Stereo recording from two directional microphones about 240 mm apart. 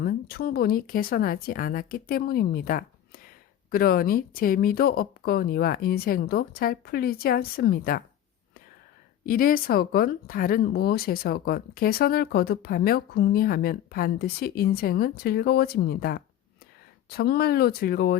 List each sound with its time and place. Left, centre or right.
0.0 s speech: left
9.2 s speech: left